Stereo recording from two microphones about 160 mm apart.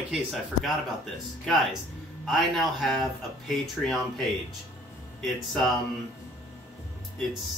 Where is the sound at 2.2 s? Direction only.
Centre (ahead or behind).